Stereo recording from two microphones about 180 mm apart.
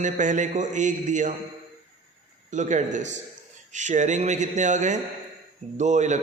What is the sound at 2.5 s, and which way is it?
A man's voice, 40° right (ahead or behind).